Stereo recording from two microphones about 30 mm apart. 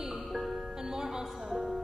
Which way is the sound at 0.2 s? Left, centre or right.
Centre.